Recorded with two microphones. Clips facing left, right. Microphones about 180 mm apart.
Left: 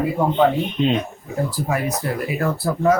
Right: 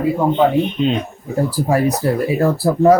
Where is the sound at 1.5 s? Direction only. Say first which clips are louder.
Right 9 dB; 35° right (ahead or behind).